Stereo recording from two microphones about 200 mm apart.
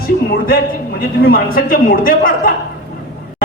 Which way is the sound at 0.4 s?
50° left (ahead or behind).